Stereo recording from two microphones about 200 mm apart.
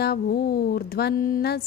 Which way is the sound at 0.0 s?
50° left (ahead or behind).